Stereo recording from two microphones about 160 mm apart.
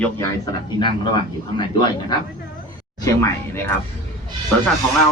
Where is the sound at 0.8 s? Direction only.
30° left (ahead or behind).